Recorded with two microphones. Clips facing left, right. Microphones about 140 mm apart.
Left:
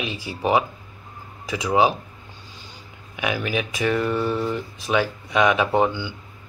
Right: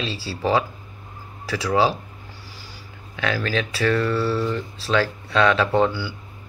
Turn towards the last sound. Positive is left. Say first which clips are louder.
# right 1 dB
turn(degrees=20)  # may be behind; listen again after turning